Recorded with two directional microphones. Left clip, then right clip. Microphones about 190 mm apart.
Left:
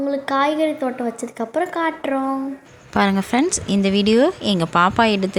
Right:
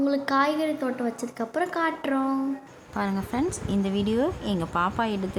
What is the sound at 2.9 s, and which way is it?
A woman's voice, 25° left (ahead or behind).